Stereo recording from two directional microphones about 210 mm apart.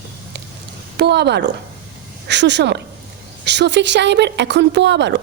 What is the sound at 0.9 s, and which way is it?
A woman's voice, 50° right (ahead or behind).